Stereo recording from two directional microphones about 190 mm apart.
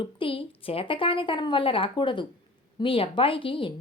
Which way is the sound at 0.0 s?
25° left (ahead or behind).